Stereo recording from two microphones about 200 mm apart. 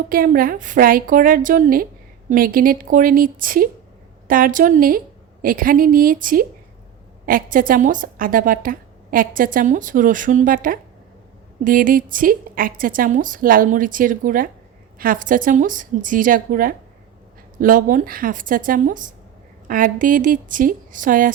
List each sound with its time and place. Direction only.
0.1 s a woman's voice: 45° right (ahead or behind)